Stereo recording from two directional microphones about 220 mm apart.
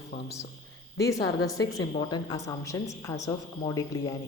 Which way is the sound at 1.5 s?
15° left (ahead or behind).